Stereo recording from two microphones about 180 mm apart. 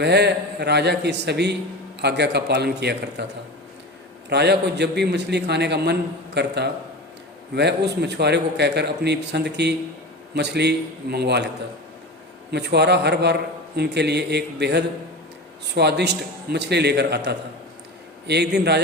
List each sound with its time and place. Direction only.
0.0 s a man's voice: 70° right (ahead or behind)
4.3 s a man's voice: 65° right (ahead or behind)
12.5 s a man's voice: 70° right (ahead or behind)